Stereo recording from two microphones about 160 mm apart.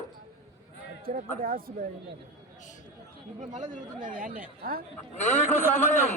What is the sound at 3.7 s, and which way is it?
Speech, 55° right (ahead or behind).